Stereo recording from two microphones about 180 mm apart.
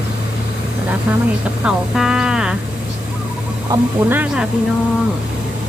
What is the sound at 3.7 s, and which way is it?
Speech, 10° right (ahead or behind).